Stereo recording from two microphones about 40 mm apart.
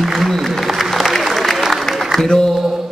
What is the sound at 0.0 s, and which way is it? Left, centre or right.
Applause, centre.